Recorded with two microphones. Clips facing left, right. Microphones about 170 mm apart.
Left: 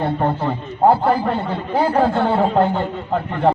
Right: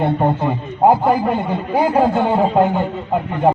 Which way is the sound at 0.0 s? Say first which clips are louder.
Right 3 dB; 20° right (ahead or behind).